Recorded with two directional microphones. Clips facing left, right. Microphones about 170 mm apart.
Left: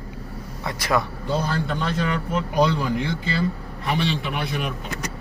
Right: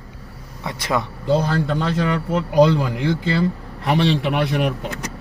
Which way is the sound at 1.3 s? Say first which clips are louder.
Right 5 dB; 90° right.